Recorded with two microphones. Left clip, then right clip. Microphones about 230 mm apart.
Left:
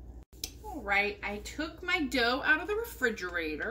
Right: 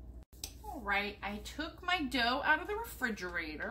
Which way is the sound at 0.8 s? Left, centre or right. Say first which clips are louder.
Left 6 dB; right.